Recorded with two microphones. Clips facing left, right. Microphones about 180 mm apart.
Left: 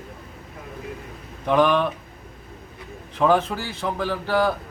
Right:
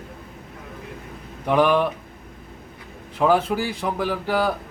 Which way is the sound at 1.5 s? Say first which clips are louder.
Right 1 dB; 10° right (ahead or behind).